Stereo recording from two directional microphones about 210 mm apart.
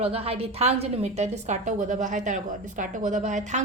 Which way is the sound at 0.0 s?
30° right (ahead or behind).